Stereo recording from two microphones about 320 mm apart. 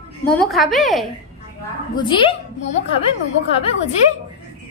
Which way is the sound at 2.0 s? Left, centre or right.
Centre.